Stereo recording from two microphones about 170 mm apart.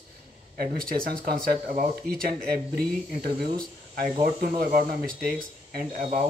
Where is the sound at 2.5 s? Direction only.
65° right (ahead or behind).